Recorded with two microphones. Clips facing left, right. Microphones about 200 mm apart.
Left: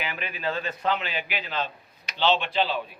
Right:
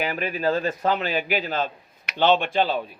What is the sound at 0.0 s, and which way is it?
A man's voice, 40° right (ahead or behind).